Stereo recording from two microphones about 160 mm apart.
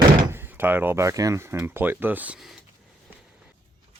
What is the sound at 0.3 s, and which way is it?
Speech, 15° right (ahead or behind).